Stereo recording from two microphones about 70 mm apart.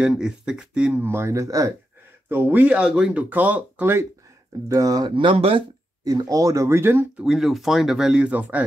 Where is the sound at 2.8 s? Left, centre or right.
Centre.